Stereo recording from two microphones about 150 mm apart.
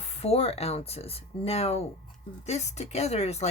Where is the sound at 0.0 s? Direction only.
40° left (ahead or behind).